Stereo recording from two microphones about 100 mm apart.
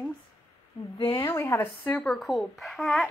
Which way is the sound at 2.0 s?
Centre (ahead or behind).